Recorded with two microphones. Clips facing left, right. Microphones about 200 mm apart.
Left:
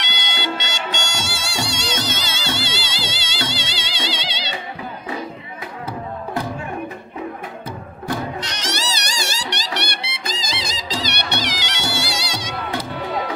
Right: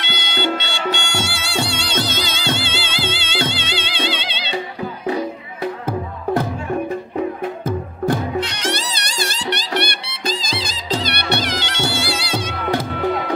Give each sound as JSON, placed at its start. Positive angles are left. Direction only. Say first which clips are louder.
{"t": 0.3, "sound": "music", "louder": "right 5 dB", "side_deg": -55}
{"t": 8.5, "sound": "music", "louder": "right 3 dB", "side_deg": -55}